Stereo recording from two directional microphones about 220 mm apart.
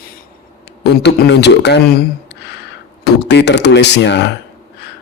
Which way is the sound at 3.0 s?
50° left (ahead or behind).